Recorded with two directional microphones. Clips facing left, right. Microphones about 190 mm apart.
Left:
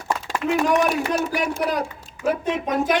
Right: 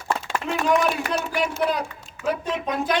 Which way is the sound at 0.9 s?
45° left (ahead or behind).